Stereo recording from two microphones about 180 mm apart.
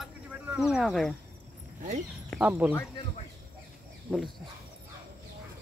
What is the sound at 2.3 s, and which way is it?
Speech, 5° right (ahead or behind).